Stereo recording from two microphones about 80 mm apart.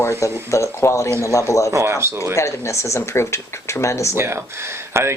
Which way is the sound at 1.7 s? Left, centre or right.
Right.